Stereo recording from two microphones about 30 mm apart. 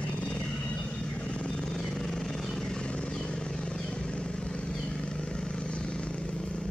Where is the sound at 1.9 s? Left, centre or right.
Centre.